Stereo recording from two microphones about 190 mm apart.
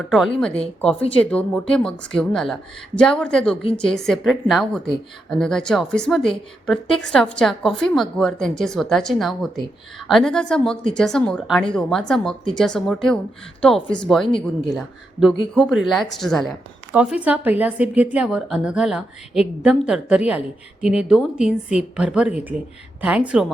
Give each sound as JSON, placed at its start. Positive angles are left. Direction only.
{"t": 0.1, "sound": "a woman's voice", "side_deg": 0}
{"t": 3.6, "sound": "a woman's voice", "side_deg": 30}
{"t": 3.9, "sound": "a woman's voice", "side_deg": 0}